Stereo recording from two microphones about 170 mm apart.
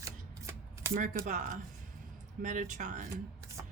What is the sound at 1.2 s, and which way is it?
Speech, 50° right (ahead or behind).